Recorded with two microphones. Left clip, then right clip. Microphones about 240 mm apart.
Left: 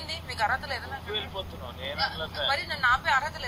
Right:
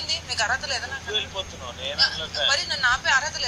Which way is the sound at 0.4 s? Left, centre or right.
Centre.